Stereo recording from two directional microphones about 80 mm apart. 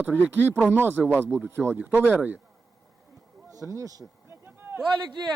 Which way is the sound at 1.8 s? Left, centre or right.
Centre.